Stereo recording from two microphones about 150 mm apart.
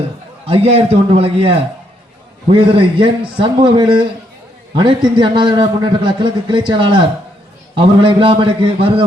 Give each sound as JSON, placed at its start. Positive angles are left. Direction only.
{"t": 0.4, "sound": "a man's voice", "side_deg": -40}